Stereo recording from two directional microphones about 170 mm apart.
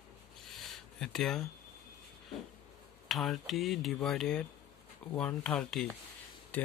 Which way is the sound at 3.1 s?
Centre (ahead or behind).